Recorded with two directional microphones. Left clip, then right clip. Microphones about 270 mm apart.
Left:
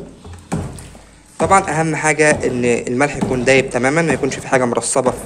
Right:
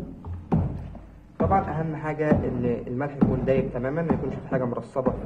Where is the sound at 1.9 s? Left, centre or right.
Left.